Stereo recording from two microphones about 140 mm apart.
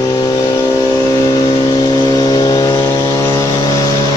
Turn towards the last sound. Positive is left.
turn(degrees=20)  # may be behind; listen again after turning